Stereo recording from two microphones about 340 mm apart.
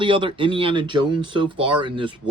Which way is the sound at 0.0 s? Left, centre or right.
Centre.